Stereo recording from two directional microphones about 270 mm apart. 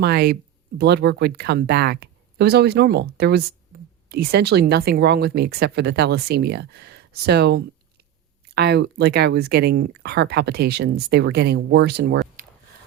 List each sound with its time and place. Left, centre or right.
0.0 s speech: right